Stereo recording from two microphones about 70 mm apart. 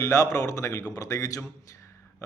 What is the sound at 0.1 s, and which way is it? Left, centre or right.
Speech, left.